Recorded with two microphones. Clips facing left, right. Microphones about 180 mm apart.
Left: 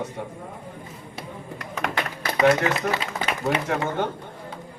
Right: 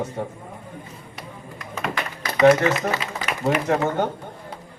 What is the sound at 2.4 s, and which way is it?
Speech, 30° right (ahead or behind).